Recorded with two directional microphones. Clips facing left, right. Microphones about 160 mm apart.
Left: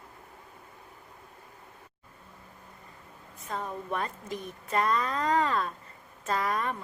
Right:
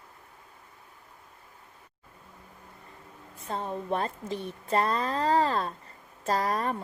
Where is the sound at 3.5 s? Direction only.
30° right (ahead or behind).